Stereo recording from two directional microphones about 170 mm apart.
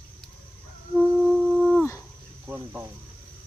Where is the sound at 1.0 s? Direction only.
Centre (ahead or behind).